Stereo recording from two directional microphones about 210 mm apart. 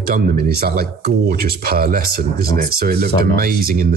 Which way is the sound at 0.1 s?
45° right (ahead or behind).